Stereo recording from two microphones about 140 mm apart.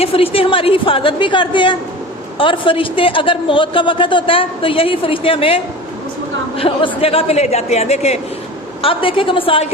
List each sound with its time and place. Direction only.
0.0 s a woman's voice: 40° left (ahead or behind)
6.6 s a woman's voice: 40° left (ahead or behind)